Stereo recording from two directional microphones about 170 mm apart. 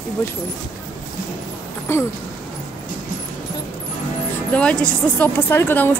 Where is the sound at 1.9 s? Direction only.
15° left (ahead or behind).